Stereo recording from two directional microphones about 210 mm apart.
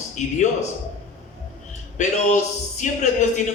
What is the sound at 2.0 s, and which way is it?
Speech, 35° left (ahead or behind).